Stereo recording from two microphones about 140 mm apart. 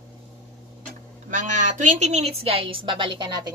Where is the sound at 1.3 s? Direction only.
65° right (ahead or behind).